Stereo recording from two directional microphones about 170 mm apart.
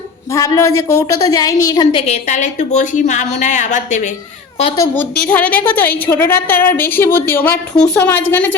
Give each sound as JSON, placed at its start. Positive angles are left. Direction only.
{"t": 0.3, "sound": "a woman's voice", "side_deg": 20}
{"t": 4.8, "sound": "a woman's voice", "side_deg": 10}